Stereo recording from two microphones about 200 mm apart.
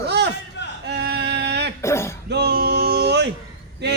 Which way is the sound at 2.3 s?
55° right (ahead or behind).